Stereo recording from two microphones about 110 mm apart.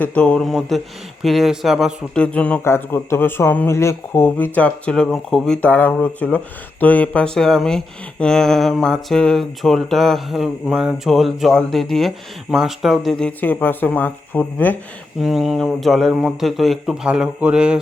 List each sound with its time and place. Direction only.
0.0 s speech: 10° left (ahead or behind)
2.1 s speech: 10° left (ahead or behind)
2.6 s speech: 25° left (ahead or behind); by 5.7 s 5° left (ahead or behind)
5.7 s speech: 15° left (ahead or behind)
13.4 s speech: 15° left (ahead or behind)
15.2 s speech: 5° right (ahead or behind)